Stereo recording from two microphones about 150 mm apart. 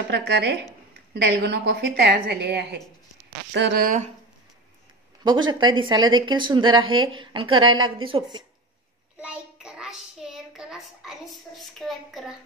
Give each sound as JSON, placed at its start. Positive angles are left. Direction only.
{"t": 0.1, "sound": "a woman's voice", "side_deg": -90}
{"t": 3.7, "sound": "speech", "side_deg": -70}
{"t": 5.2, "sound": "speech", "side_deg": -30}
{"t": 9.2, "sound": "child singing", "side_deg": -5}